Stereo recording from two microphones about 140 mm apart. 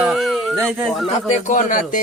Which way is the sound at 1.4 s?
65° left (ahead or behind).